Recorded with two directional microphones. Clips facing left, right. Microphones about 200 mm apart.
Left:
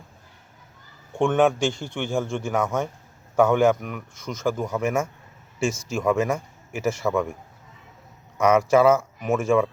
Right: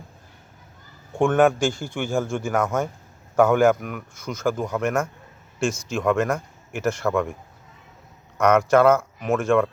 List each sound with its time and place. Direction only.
1.2 s speech: centre (ahead or behind)
8.4 s speech: 5° left (ahead or behind)